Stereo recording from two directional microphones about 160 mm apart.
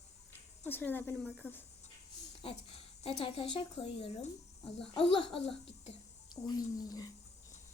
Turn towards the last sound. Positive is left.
turn(degrees=25)  # may be behind; listen again after turning